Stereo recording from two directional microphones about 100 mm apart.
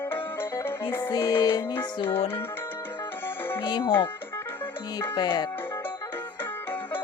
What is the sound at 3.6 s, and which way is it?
Music, 50° left (ahead or behind).